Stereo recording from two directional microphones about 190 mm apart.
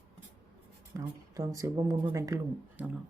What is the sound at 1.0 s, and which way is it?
Speech, 15° right (ahead or behind).